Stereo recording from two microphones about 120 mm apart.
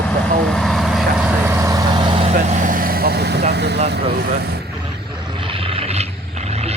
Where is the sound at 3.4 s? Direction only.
65° right (ahead or behind).